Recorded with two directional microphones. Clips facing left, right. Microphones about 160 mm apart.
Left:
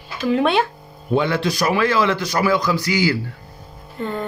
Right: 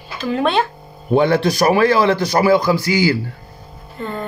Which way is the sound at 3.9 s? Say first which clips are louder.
Left 1 dB; 15° left (ahead or behind).